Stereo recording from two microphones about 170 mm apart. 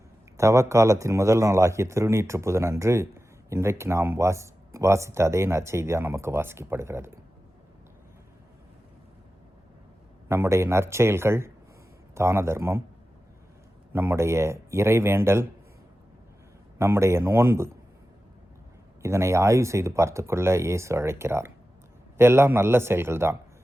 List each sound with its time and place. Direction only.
0.3 s speech: 20° right (ahead or behind)
10.2 s speech: 15° right (ahead or behind)
13.9 s speech: 15° right (ahead or behind)
16.7 s speech: 15° right (ahead or behind)
19.0 s speech: 15° right (ahead or behind)